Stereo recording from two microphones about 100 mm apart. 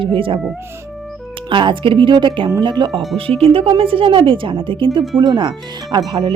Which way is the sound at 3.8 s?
65° right (ahead or behind).